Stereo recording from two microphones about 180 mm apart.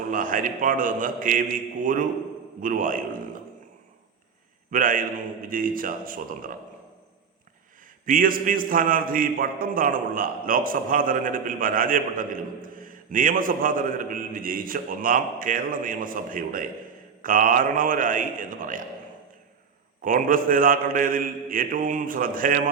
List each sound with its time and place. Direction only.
0.1 s a man's voice: 50° right (ahead or behind)
4.7 s a man's voice: 50° right (ahead or behind)
8.0 s a man's voice: 50° right (ahead or behind)
20.0 s a man's voice: 50° right (ahead or behind)